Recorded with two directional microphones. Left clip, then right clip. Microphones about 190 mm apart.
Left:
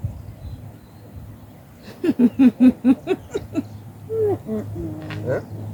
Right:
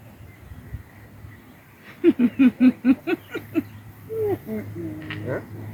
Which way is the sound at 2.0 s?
50° left (ahead or behind).